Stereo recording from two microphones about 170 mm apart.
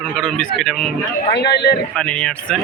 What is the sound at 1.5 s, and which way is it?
Speech, 75° left (ahead or behind).